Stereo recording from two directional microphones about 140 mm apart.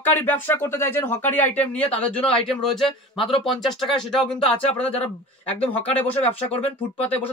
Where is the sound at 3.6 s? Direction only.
Centre (ahead or behind).